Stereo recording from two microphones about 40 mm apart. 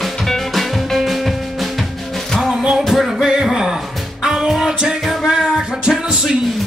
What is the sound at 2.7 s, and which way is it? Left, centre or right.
Music, centre.